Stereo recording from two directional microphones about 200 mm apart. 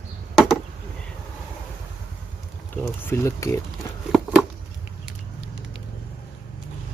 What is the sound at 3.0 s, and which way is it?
Speech, 15° left (ahead or behind).